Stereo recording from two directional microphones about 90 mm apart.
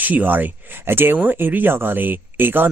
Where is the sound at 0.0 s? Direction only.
20° right (ahead or behind).